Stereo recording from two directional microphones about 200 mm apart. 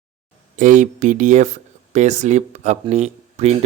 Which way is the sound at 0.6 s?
40° right (ahead or behind).